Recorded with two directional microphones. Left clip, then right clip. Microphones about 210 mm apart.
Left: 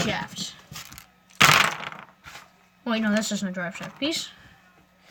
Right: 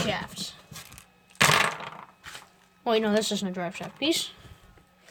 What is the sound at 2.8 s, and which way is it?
A woman's voice, 25° right (ahead or behind).